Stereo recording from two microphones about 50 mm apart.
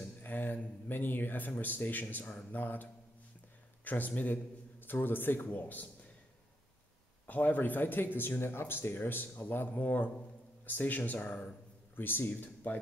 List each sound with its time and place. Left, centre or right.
0.2 s a sound: left
1.6 s a man's voice: left
7.2 s a man's voice: left
11.9 s speech: left